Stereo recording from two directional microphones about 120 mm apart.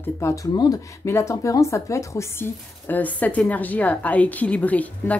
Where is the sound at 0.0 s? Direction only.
25° left (ahead or behind).